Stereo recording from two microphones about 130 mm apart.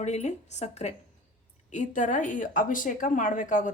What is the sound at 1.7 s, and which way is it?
A woman's voice, 70° left (ahead or behind).